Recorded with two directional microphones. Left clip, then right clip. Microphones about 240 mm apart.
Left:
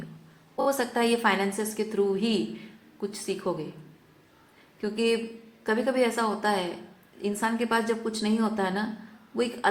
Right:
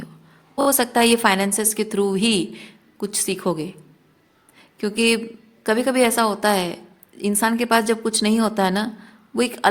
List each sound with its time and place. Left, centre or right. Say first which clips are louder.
0.5 s a woman's voice: right 7 dB; right
4.8 s a woman's voice: right 6 dB; right